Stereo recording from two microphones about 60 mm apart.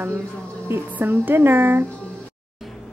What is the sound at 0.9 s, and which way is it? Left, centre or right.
Speech, right.